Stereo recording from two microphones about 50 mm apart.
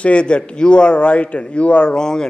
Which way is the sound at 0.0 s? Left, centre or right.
Left.